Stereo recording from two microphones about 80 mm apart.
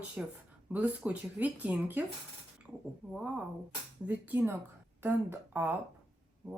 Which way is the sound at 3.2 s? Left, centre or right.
Centre.